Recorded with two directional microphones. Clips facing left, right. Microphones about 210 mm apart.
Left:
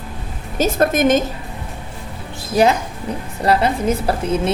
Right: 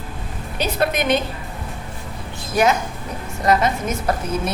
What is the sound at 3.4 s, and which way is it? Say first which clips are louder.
A woman's voice: left 2 dB; 30° left (ahead or behind).